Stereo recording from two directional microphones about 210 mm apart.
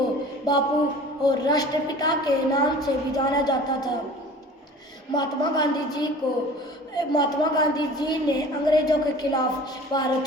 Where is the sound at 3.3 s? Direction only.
20° left (ahead or behind).